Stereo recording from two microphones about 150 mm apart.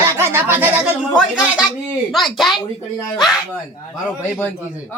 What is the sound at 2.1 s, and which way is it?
Speech, centre (ahead or behind).